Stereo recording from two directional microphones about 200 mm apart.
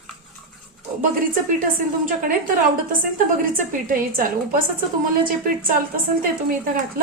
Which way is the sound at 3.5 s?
45° right (ahead or behind).